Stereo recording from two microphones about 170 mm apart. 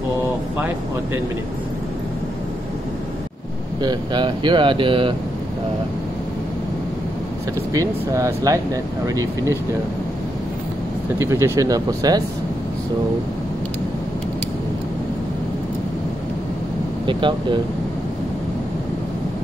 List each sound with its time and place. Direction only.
3.8 s speech: 25° right (ahead or behind)
7.7 s speech: 20° right (ahead or behind)
11.1 s speech: 15° right (ahead or behind)
17.0 s speech: 30° right (ahead or behind)